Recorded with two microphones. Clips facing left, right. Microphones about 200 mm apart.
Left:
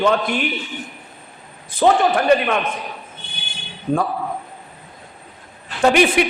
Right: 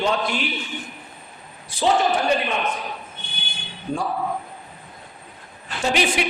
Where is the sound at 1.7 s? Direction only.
60° left (ahead or behind).